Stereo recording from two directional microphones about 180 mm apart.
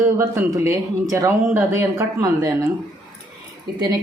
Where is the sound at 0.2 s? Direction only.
15° right (ahead or behind).